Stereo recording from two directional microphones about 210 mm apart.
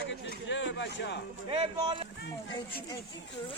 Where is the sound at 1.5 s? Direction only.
25° right (ahead or behind).